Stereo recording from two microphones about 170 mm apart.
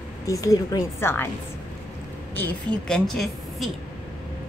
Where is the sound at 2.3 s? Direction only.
5° left (ahead or behind).